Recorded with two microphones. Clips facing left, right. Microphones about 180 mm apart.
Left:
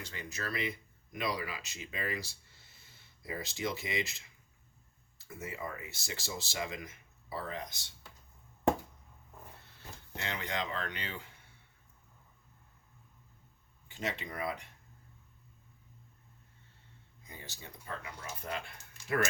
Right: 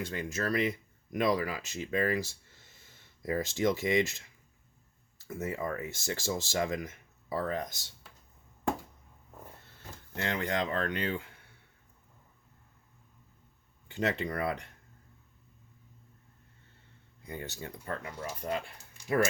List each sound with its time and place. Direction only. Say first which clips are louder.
0.0 s speech: right 8 dB; 50° right (ahead or behind)
5.3 s speech: right 7 dB; 45° right (ahead or behind)
10.2 s speech: right 6 dB; 50° right (ahead or behind)
13.9 s speech: right 7 dB; 65° right (ahead or behind)
17.2 s speech: right 10 dB; 65° right (ahead or behind)